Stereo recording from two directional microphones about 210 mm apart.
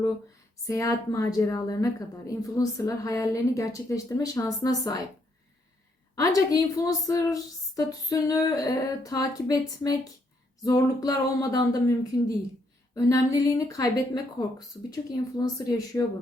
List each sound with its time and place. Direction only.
0.7 s a woman's voice: 15° left (ahead or behind)
6.1 s a woman's voice: 15° left (ahead or behind)